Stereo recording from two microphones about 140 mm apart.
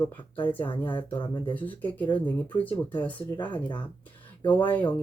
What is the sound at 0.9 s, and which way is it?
Speech, 35° left (ahead or behind).